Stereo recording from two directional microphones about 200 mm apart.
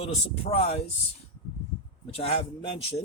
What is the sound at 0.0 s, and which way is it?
Speech, 30° left (ahead or behind).